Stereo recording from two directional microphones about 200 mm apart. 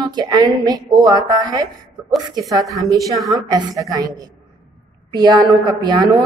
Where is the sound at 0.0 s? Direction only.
20° right (ahead or behind).